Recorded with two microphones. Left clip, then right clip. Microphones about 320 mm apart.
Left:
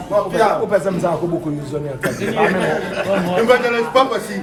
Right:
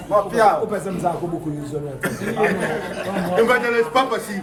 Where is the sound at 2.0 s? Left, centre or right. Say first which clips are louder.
Left 3 dB; centre.